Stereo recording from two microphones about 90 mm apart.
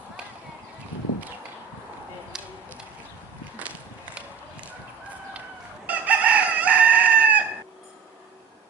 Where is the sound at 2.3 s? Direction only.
5° right (ahead or behind).